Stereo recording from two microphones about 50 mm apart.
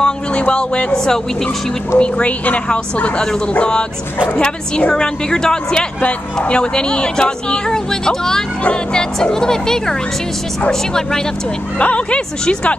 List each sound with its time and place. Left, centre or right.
0.0 s speech: left
2.0 s speech: left
5.9 s speech: left
11.8 s speech: left